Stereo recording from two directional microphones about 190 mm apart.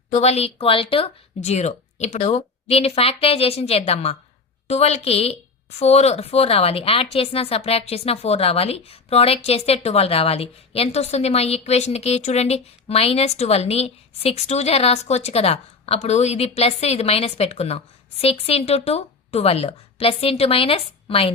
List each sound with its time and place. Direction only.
0.1 s speech: 35° left (ahead or behind)